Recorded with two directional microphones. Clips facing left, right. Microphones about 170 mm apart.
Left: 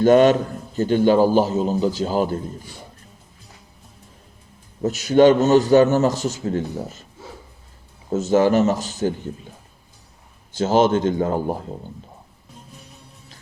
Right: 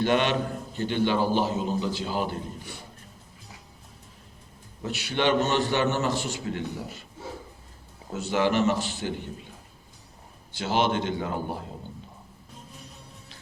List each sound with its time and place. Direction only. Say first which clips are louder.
0.0 s a man's voice: left 10 dB; 40° left (ahead or behind)
4.8 s a man's voice: left 13 dB; 40° left (ahead or behind)
8.1 s a man's voice: left 8 dB; 45° left (ahead or behind)
10.5 s a man's voice: left 8 dB; 45° left (ahead or behind)